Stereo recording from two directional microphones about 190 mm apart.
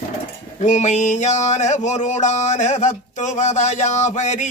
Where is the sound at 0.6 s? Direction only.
40° left (ahead or behind).